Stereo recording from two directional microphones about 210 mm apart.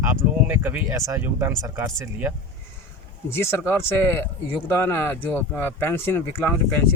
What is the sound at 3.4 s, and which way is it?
A man's voice, 10° left (ahead or behind).